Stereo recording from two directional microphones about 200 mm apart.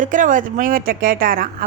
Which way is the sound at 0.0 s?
40° right (ahead or behind).